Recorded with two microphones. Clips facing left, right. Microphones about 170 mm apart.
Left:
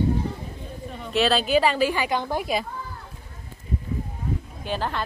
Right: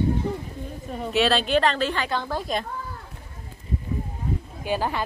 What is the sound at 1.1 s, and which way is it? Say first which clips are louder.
A woman's voice: left 1 dB; centre (ahead or behind).